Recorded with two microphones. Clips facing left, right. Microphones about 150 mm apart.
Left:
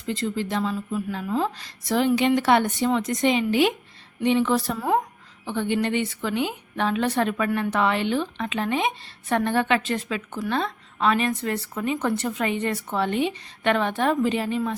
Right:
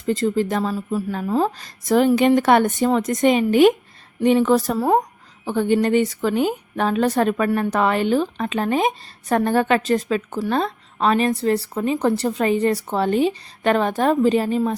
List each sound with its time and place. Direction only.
0.0 s a woman's voice: 45° right (ahead or behind)